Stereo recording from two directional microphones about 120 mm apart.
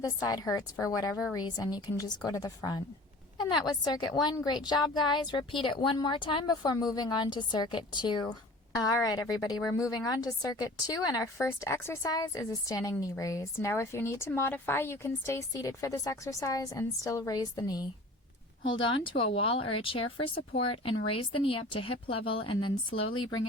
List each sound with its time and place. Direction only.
0.2 s a woman's voice: 30° left (ahead or behind)
1.4 s a woman's voice: 35° left (ahead or behind)
18.7 s speech: 45° left (ahead or behind)